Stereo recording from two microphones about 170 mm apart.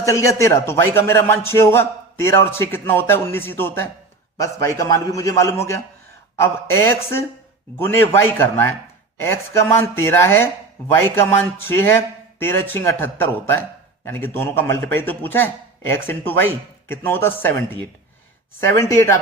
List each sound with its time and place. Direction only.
0.0 s a man's voice: 20° left (ahead or behind)
18.6 s speech: 15° left (ahead or behind)